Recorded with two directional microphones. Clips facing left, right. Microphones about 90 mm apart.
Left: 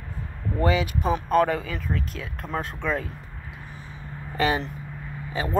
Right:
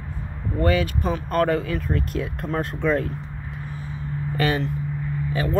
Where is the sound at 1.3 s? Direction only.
Centre (ahead or behind).